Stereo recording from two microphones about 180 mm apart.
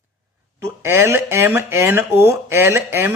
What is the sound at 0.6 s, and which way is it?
Speech, 15° right (ahead or behind).